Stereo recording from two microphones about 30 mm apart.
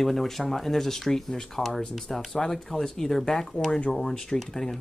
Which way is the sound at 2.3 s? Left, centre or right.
Centre.